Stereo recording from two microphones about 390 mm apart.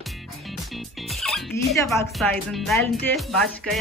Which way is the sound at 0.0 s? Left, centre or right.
Centre.